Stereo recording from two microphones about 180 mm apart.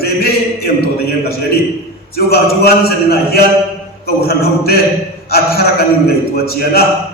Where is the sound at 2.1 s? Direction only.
60° left (ahead or behind).